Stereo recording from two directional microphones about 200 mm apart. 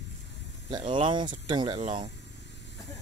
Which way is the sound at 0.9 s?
25° right (ahead or behind).